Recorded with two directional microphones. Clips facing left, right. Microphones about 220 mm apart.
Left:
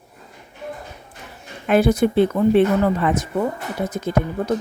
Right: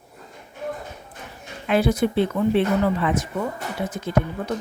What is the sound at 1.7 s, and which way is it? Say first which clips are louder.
Speech: left 4 dB; 50° left (ahead or behind).